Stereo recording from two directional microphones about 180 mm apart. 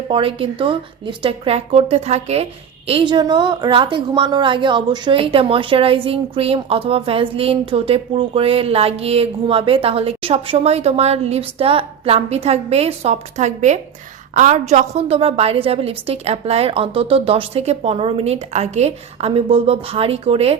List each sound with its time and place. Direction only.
0.1 s speech: 30° right (ahead or behind)